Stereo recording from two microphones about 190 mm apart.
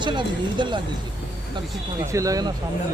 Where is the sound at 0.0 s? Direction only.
25° right (ahead or behind).